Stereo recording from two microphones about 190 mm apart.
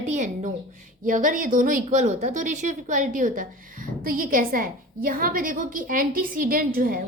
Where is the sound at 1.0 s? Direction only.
45° right (ahead or behind).